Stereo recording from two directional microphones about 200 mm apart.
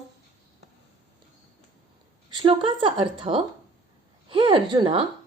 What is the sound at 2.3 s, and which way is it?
Speech, 25° right (ahead or behind).